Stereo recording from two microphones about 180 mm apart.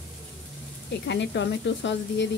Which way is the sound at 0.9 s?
75° left (ahead or behind).